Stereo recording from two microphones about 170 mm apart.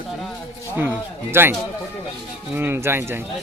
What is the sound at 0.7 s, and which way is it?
Speech, 10° right (ahead or behind).